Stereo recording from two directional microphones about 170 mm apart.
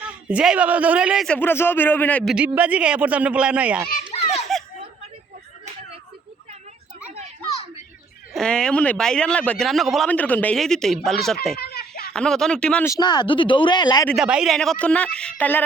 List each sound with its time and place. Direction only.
0.0 s a man's voice: 5° right (ahead or behind)
1.4 s a man's voice: 15° left (ahead or behind)
2.3 s speech: 5° right (ahead or behind)
4.5 s a sound: centre (ahead or behind)
8.3 s speech: 5° left (ahead or behind)
11.5 s a sound: 70° left (ahead or behind)
12.1 s speech: 5° left (ahead or behind)
12.9 s speech: 25° left (ahead or behind)
14.1 s speech: 5° right (ahead or behind)